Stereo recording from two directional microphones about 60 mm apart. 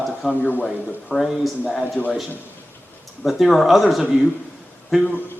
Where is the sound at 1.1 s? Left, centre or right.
Centre.